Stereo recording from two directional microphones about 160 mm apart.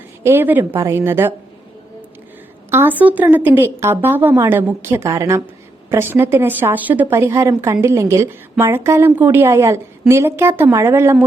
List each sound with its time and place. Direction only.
0.2 s a woman's voice: 15° right (ahead or behind)
2.6 s speech: 15° right (ahead or behind)